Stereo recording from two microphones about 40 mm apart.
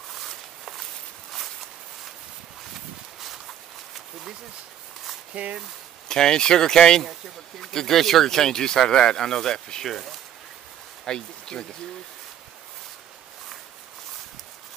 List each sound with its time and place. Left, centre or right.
0.1 s walk: centre
2.7 s a sound: centre
5.3 s speech: right
6.0 s speech: centre
7.6 s speech: centre
11.1 s speech: centre